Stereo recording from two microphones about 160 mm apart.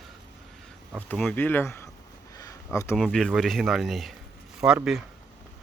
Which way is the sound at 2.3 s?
20° left (ahead or behind).